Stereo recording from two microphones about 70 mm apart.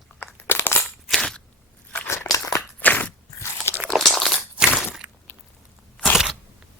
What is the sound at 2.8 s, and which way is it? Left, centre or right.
Biting, left.